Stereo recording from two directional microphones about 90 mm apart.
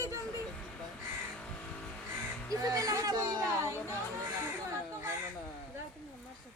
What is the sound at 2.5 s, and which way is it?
Speech, 40° right (ahead or behind).